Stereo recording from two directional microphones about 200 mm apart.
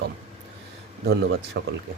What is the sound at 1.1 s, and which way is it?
Speech, 60° right (ahead or behind).